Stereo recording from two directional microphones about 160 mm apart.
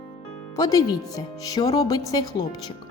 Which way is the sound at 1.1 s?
35° left (ahead or behind).